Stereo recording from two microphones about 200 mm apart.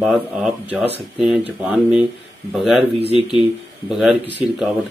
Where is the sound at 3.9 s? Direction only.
Centre (ahead or behind).